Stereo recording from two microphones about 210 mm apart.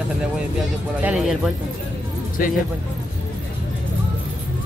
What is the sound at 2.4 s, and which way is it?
Speech, 40° left (ahead or behind).